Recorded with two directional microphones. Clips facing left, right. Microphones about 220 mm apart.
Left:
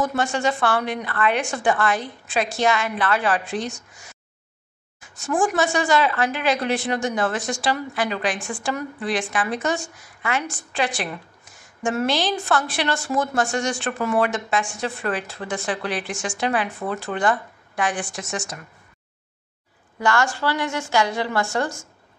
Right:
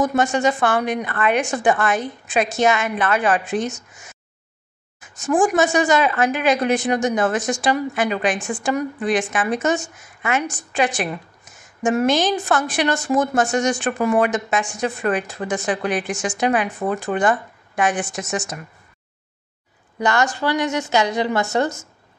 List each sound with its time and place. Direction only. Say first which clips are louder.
0.0 s a woman's voice: right 4 dB; 20° right (ahead or behind)
20.0 s a woman's voice: right 2 dB; 20° right (ahead or behind)